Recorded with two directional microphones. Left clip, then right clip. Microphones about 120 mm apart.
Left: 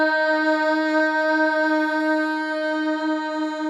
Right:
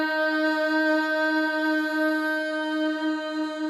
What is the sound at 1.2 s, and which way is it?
Music, 25° left (ahead or behind).